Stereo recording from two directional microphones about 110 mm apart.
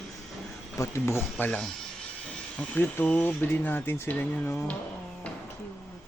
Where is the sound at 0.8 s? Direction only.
25° left (ahead or behind).